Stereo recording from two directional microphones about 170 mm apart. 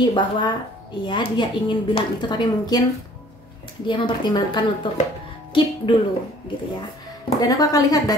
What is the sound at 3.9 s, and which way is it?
Speech, 30° left (ahead or behind).